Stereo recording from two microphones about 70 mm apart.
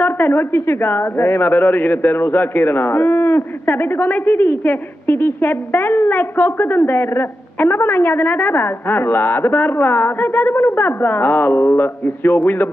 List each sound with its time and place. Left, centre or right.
0.0 s a man's voice: left